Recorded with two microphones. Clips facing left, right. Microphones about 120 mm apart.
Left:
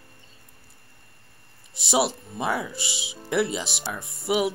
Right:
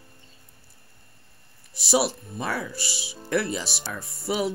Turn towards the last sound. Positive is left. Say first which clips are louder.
# left 3 dB
turn(degrees=15)  # may be behind; listen again after turning